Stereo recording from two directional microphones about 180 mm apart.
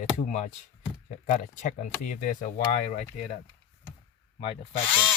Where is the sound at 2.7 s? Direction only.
40° left (ahead or behind).